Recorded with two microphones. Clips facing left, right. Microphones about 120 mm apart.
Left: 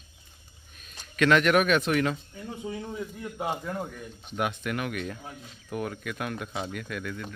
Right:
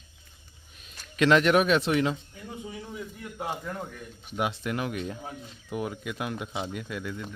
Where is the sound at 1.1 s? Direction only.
25° right (ahead or behind).